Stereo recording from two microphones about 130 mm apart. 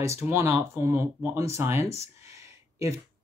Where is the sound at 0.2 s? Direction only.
20° right (ahead or behind).